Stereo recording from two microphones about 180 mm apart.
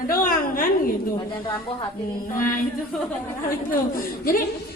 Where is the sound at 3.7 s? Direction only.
50° left (ahead or behind).